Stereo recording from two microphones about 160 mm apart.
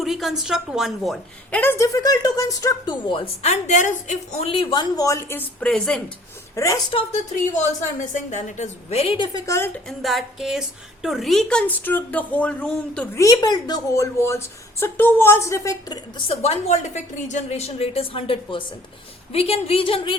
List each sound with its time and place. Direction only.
0.0 s a woman's voice: centre (ahead or behind)
1.8 s a woman's voice: 20° left (ahead or behind); by 6.0 s 5° left (ahead or behind)
6.6 s a woman's voice: 20° left (ahead or behind)
6.9 s a woman's voice: 45° left (ahead or behind)
9.5 s a woman's voice: 15° left (ahead or behind)
10.0 s a woman's voice: centre (ahead or behind)
13.1 s a woman's voice: 25° left (ahead or behind)